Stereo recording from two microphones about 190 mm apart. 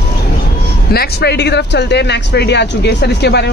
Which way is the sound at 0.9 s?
60° left (ahead or behind).